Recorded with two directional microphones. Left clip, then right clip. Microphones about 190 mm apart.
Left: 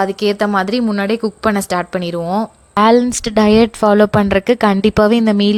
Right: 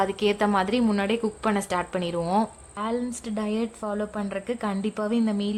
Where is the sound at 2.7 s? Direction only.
55° left (ahead or behind).